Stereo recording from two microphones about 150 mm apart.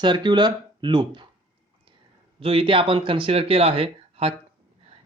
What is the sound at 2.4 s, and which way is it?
Speech, 40° right (ahead or behind).